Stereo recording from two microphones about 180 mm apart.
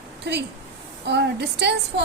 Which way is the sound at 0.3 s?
70° right (ahead or behind).